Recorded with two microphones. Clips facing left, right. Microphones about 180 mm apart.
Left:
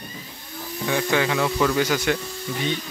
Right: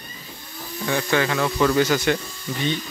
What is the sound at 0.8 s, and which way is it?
Speech, 10° left (ahead or behind).